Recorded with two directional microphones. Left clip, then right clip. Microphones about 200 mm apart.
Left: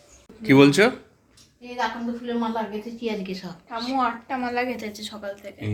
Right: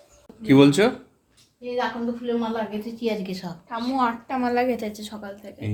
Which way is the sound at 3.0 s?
65° right (ahead or behind).